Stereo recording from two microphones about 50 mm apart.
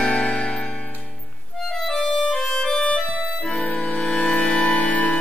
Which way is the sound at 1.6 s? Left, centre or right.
Centre.